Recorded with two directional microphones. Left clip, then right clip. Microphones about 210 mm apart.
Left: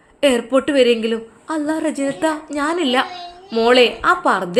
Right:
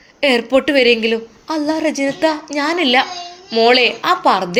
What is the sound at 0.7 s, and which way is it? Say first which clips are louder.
Speech: right 1 dB; 50° left (ahead or behind).